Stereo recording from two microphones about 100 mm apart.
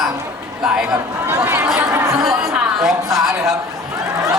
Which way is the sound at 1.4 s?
30° right (ahead or behind).